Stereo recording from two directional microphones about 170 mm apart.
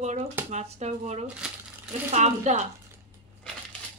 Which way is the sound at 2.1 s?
40° right (ahead or behind).